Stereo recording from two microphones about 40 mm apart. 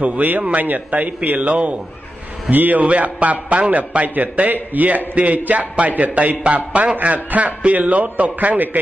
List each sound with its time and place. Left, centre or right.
0.0 s a man's voice: right
2.5 s speech: right
2.8 s a man's voice: right